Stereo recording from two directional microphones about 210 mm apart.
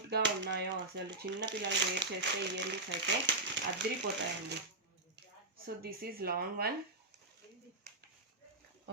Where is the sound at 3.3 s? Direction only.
60° right (ahead or behind).